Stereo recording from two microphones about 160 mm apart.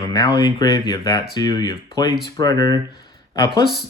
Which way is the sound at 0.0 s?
25° left (ahead or behind).